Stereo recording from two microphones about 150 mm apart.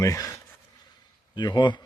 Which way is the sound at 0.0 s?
20° left (ahead or behind).